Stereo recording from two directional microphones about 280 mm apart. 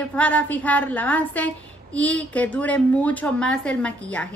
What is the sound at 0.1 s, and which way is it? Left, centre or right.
Speech, centre.